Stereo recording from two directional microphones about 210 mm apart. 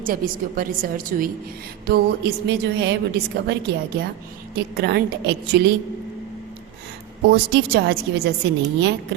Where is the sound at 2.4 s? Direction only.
55° right (ahead or behind).